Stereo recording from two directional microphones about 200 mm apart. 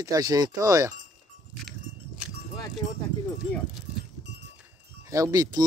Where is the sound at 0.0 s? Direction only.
20° right (ahead or behind).